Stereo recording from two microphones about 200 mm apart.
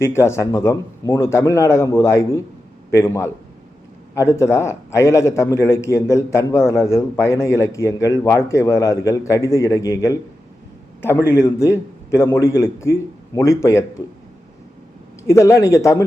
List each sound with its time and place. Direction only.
0.0 s a man's voice: 15° left (ahead or behind)
11.3 s a man's voice: 15° left (ahead or behind)
15.3 s a man's voice: 15° left (ahead or behind)